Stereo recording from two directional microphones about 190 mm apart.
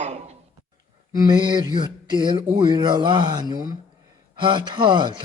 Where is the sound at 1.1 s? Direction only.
20° right (ahead or behind).